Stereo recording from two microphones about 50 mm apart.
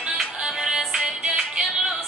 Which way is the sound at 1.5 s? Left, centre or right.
Centre.